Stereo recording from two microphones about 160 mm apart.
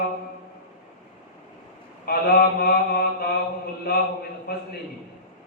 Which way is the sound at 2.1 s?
70° left (ahead or behind).